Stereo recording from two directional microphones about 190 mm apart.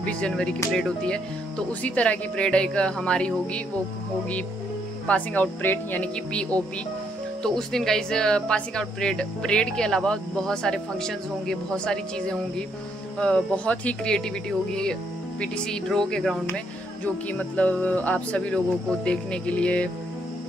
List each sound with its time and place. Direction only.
0.0 s speech: 5° left (ahead or behind)
5.0 s speech: 10° left (ahead or behind)
7.4 s speech: centre (ahead or behind)